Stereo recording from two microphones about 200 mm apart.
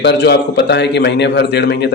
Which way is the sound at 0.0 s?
55° left (ahead or behind).